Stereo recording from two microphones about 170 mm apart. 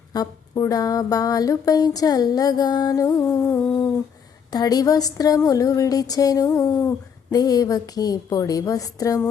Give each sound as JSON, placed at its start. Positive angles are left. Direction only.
{"t": 0.1, "sound": "speech", "side_deg": 20}